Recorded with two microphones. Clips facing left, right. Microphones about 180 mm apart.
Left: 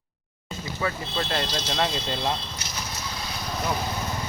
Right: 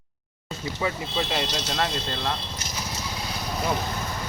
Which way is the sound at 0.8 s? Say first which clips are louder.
Right 1 dB; 15° right (ahead or behind).